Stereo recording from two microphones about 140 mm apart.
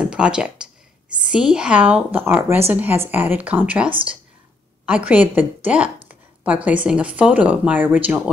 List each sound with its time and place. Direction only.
0.0 s a woman's voice: 5° right (ahead or behind)